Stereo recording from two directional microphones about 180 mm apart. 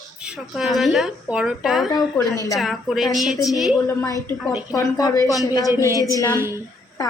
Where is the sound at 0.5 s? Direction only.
Centre (ahead or behind).